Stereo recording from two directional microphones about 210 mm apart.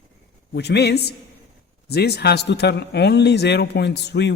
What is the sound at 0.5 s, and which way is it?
A man's voice, 55° left (ahead or behind).